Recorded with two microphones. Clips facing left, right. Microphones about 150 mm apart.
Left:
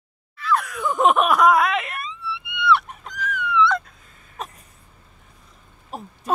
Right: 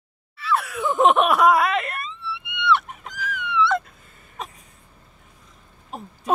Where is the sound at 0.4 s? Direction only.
5° right (ahead or behind).